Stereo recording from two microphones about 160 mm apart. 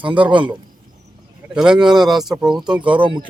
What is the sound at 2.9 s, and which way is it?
Speech, 30° right (ahead or behind).